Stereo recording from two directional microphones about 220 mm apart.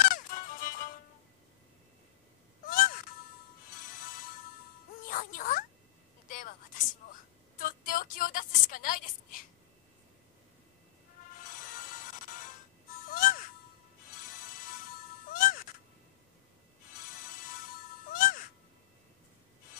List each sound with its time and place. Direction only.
0.1 s music: 40° left (ahead or behind)
2.6 s music: 40° left (ahead or behind)
6.2 s a sound: 40° left (ahead or behind)
7.6 s a sound: 40° left (ahead or behind)
11.3 s music: 35° left (ahead or behind)
17.0 s music: 35° left (ahead or behind)